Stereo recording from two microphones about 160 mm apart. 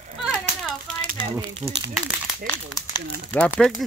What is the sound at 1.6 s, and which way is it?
Speech, 15° right (ahead or behind).